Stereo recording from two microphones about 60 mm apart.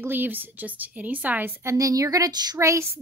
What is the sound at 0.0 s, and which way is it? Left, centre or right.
A woman's voice, right.